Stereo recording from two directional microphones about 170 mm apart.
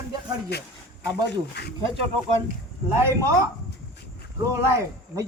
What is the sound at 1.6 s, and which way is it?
Speech, 85° left.